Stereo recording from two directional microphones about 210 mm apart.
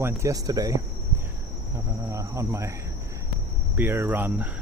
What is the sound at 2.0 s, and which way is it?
Cricket, 15° right (ahead or behind).